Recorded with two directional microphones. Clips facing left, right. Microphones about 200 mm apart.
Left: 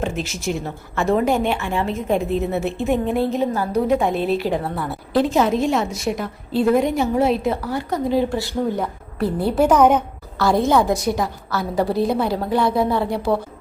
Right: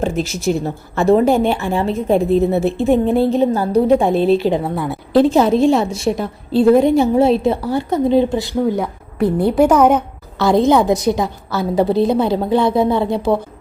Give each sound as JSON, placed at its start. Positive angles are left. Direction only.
{"t": 0.0, "sound": "speech", "side_deg": -35}
{"t": 4.6, "sound": "a woman's voice", "side_deg": -15}
{"t": 5.1, "sound": "a woman's voice", "side_deg": -30}
{"t": 10.3, "sound": "a woman's voice", "side_deg": -20}